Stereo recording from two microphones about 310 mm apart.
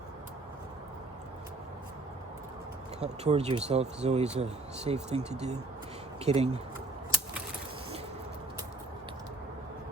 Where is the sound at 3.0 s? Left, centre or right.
Centre.